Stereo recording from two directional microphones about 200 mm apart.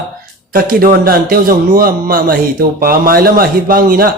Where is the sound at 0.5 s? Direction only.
45° right (ahead or behind).